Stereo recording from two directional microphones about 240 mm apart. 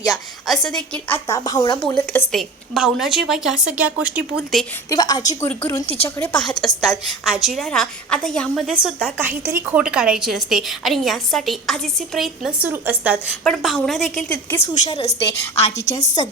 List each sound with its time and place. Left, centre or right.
0.1 s a woman's voice: centre
1.5 s speech: centre
2.3 s a woman's voice: centre
4.9 s speech: centre
5.8 s a woman's voice: left
6.1 s a woman's voice: centre
14.5 s a woman's voice: left